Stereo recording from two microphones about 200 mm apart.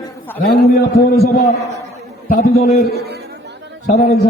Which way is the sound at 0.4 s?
50° left (ahead or behind).